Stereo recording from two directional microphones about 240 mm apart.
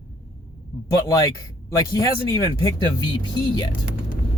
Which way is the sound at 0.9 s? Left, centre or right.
Centre.